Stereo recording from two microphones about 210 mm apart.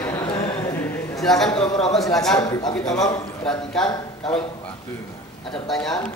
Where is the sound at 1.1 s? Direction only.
Centre (ahead or behind).